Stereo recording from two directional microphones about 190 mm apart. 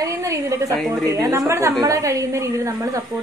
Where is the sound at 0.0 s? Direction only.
15° right (ahead or behind).